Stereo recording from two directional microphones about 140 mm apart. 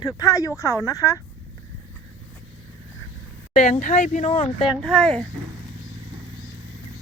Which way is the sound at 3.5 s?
60° left (ahead or behind).